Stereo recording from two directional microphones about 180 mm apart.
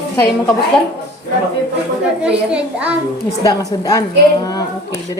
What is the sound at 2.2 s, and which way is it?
Speech, 5° right (ahead or behind).